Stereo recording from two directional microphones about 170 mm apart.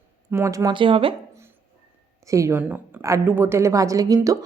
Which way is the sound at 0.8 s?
30° right (ahead or behind).